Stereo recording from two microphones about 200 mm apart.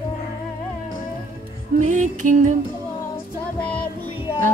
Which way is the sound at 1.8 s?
35° right (ahead or behind).